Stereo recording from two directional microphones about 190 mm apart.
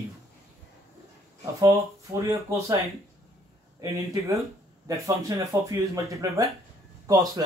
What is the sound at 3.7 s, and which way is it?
Speech, 15° right (ahead or behind).